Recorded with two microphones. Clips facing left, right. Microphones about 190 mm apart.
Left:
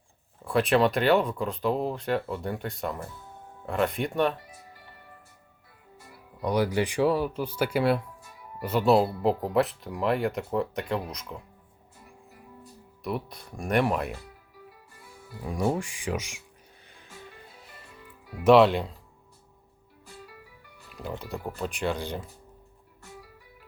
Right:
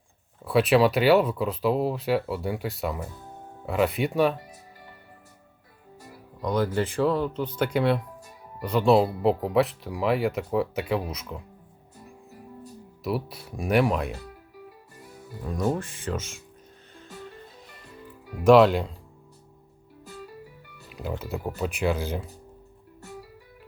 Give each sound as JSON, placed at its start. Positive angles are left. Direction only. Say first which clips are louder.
{"t": 0.4, "sound": "speech", "louder": "right 3 dB", "side_deg": 0}
{"t": 6.4, "sound": "speech", "louder": "even", "side_deg": 10}
{"t": 13.0, "sound": "speech", "louder": "right 3 dB", "side_deg": -5}
{"t": 15.4, "sound": "speech", "louder": "even", "side_deg": 10}
{"t": 18.4, "sound": "speech", "louder": "right 2 dB", "side_deg": 0}
{"t": 20.9, "sound": "speech", "louder": "right 3 dB", "side_deg": -5}